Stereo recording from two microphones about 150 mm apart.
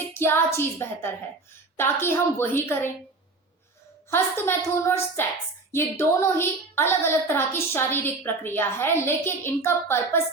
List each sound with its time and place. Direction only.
0.1 s a woman's voice: 15° left (ahead or behind)
4.1 s a woman's voice: 15° left (ahead or behind)